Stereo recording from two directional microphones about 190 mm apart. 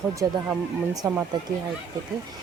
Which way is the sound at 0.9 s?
20° right (ahead or behind).